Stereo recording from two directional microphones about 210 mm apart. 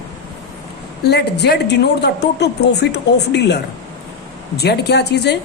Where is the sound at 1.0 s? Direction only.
50° left (ahead or behind).